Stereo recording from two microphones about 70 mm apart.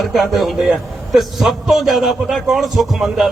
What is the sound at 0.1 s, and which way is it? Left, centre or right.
A man's voice, centre.